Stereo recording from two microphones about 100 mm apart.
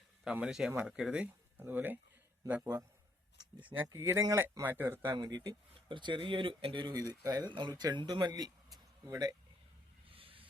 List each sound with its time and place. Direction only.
0.3 s speech: 5° right (ahead or behind)
3.8 s speech: 30° right (ahead or behind)
5.1 s speech: 40° right (ahead or behind); by 6.8 s 65° right (ahead or behind)
6.8 s speech: 40° right (ahead or behind)
7.5 s speech: 45° right (ahead or behind)
10.1 s a sound: 65° right (ahead or behind)